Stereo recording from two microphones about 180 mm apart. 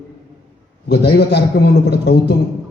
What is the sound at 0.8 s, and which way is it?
A man's voice, 65° left (ahead or behind).